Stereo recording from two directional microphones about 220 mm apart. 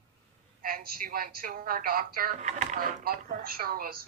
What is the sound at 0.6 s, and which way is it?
A woman's voice, 40° right (ahead or behind).